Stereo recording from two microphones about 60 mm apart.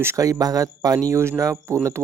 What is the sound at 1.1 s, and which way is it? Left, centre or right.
Speech, right.